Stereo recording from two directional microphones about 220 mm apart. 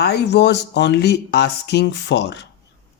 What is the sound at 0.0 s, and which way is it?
Speech, 50° left (ahead or behind).